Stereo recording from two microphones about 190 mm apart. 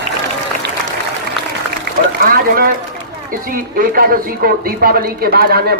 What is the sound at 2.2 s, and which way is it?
A man's voice, 50° right (ahead or behind).